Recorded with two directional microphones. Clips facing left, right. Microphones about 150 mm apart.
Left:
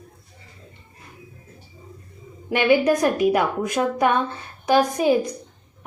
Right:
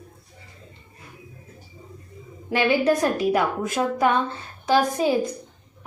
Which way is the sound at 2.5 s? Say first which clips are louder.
Left 2 dB; 15° left (ahead or behind).